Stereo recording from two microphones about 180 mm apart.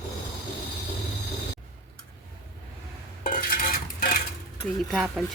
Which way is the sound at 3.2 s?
50° left (ahead or behind).